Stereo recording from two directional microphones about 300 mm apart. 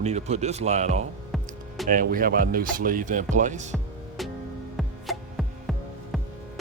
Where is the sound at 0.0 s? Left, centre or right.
Right.